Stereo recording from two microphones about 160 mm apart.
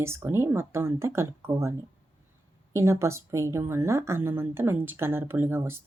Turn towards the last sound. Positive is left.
turn(degrees=-15)  # may be behind; listen again after turning